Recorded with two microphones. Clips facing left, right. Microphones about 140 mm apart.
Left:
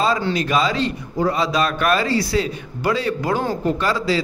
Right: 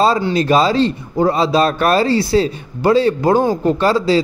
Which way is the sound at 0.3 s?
35° right (ahead or behind).